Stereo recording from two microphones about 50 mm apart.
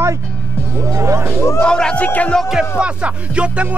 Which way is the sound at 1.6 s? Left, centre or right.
Centre.